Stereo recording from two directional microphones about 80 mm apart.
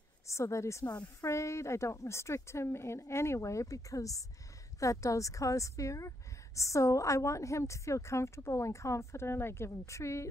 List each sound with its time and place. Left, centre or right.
0.3 s a woman's voice: left